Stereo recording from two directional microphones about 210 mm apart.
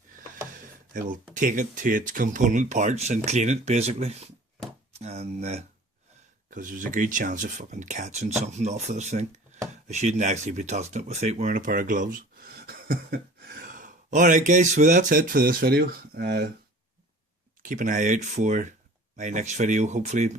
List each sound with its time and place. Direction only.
0.5 s speech: 40° right (ahead or behind)
17.6 s speech: 40° right (ahead or behind)